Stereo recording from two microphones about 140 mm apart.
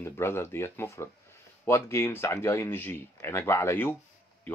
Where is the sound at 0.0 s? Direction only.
20° left (ahead or behind).